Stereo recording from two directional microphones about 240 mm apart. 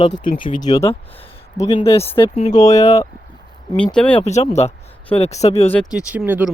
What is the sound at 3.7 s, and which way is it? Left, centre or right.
Speech, centre.